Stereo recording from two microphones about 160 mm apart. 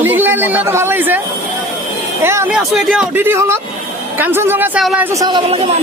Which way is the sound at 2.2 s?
15° right (ahead or behind).